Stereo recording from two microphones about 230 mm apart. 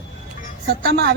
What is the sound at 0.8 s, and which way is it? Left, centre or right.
Speech, right.